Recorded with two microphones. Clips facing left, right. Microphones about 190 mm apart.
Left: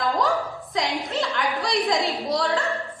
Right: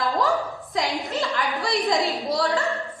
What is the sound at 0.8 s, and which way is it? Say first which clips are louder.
A woman's voice: even; centre (ahead or behind).